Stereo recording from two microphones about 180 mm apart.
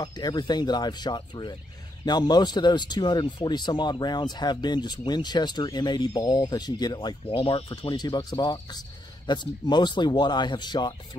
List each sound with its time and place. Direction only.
0.0 s speech: 25° left (ahead or behind)